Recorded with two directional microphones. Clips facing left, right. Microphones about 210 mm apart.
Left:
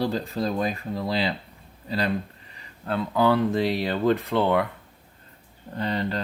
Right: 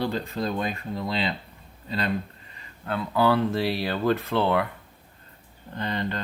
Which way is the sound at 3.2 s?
15° left (ahead or behind).